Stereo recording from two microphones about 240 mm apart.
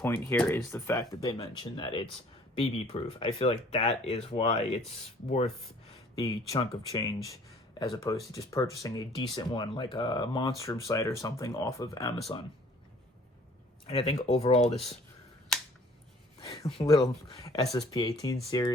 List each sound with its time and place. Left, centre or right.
0.0 s speech: centre; by 4.8 s left
6.2 s speech: centre
13.8 s speech: left
16.4 s speech: left